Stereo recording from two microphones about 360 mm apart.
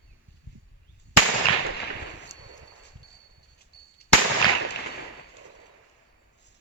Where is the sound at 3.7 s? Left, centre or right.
Left.